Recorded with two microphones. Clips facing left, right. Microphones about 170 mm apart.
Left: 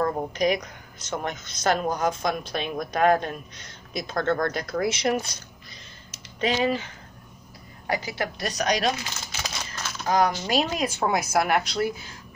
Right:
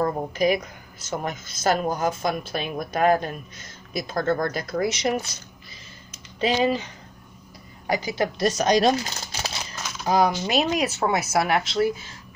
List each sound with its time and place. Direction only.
0.0 s speech: 5° right (ahead or behind)
6.4 s speech: 30° right (ahead or behind)
10.0 s speech: 10° right (ahead or behind)